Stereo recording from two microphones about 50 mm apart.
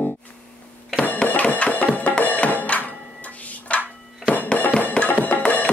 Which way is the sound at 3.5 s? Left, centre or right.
Left.